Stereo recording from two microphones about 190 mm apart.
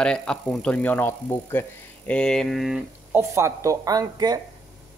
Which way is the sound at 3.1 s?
15° right (ahead or behind).